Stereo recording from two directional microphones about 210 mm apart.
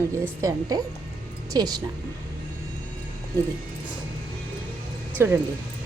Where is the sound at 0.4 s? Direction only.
15° right (ahead or behind).